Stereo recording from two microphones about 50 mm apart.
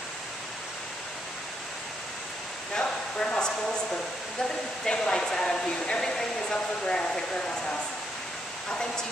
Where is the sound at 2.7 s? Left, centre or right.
Centre.